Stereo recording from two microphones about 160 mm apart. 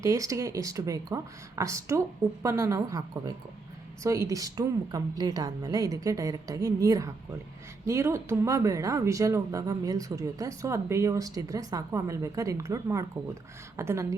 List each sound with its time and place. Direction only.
0.0 s speech: 20° right (ahead or behind)